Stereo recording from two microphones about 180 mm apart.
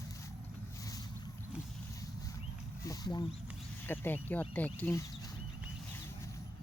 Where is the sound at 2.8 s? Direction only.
25° left (ahead or behind).